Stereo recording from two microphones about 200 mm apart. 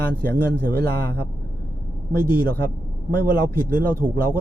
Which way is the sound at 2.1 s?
45° right (ahead or behind).